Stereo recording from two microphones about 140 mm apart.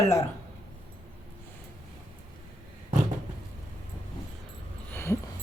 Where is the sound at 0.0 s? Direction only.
20° left (ahead or behind).